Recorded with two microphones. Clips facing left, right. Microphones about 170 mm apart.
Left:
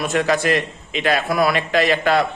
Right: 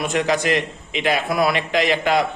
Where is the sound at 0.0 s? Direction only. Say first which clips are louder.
Left 1 dB; 15° right (ahead or behind).